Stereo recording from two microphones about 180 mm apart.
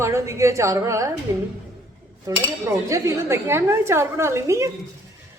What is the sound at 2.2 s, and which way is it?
Speech, 20° right (ahead or behind).